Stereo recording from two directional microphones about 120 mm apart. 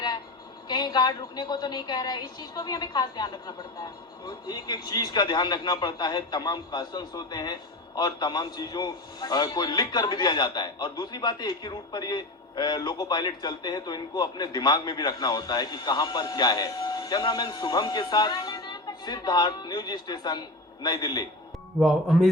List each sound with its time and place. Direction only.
0.7 s a man's voice: 35° left (ahead or behind)
21.8 s speech: centre (ahead or behind)